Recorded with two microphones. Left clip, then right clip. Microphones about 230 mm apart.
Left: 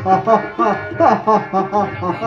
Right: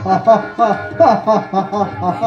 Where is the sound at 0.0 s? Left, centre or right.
Right.